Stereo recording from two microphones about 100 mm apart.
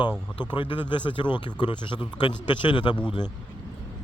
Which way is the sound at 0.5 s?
55° left (ahead or behind).